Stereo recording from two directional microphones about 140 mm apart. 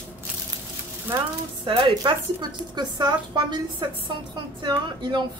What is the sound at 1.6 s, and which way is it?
A woman's voice, 35° right (ahead or behind).